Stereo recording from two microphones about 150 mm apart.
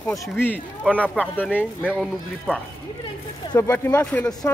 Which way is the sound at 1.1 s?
10° left (ahead or behind).